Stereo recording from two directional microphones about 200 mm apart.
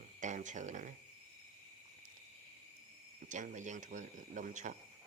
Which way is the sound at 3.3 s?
40° right (ahead or behind).